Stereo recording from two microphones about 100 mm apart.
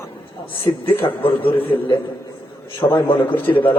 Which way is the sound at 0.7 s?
50° left (ahead or behind).